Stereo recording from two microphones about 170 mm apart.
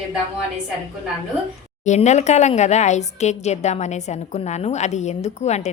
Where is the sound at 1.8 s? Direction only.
45° left (ahead or behind).